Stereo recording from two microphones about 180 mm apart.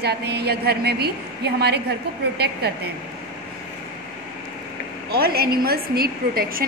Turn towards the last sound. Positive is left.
turn(degrees=-55)  # may be behind; listen again after turning